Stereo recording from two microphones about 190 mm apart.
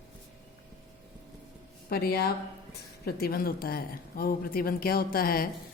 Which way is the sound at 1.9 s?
55° left (ahead or behind).